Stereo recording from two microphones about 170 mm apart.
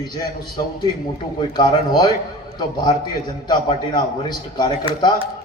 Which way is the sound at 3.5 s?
25° left (ahead or behind).